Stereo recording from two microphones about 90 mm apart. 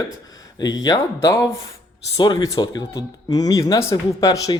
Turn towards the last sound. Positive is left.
turn(degrees=40)  # may be behind; listen again after turning